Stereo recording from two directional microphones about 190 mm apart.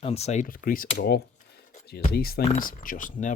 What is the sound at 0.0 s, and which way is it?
Speech, 35° left (ahead or behind).